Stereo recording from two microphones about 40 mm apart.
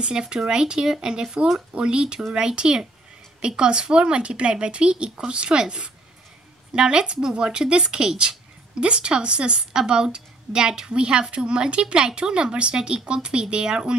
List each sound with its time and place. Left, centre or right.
0.0 s speech: right